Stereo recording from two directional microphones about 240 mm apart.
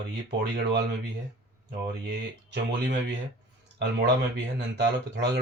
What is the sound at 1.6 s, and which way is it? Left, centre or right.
Speech, right.